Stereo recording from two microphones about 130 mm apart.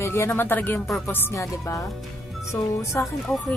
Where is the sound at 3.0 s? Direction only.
15° left (ahead or behind).